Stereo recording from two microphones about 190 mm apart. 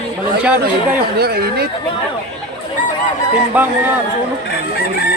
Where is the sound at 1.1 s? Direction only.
55° right (ahead or behind).